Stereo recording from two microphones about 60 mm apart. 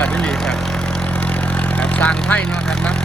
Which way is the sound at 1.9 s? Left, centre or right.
Left.